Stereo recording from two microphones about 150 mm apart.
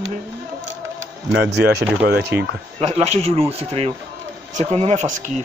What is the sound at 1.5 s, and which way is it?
Speech, 90° right.